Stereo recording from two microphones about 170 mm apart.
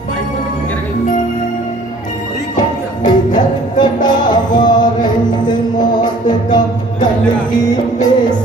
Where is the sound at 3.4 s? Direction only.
25° left (ahead or behind).